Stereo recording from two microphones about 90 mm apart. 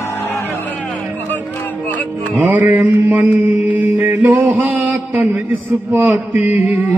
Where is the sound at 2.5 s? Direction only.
20° right (ahead or behind).